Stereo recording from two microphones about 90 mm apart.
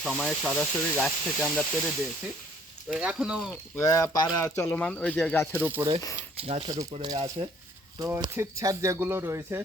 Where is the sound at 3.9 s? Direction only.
45° left (ahead or behind).